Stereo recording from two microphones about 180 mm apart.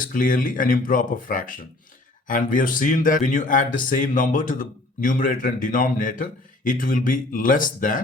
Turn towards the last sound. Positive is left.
turn(degrees=45)  # may be behind; listen again after turning